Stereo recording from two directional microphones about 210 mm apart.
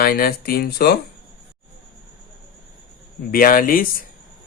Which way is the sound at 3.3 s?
45° left (ahead or behind).